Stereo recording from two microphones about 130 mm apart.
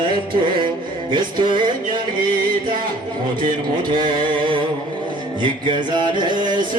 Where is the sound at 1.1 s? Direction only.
35° right (ahead or behind).